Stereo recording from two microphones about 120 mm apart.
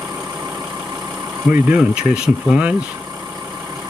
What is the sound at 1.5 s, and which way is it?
Speech, 10° right (ahead or behind).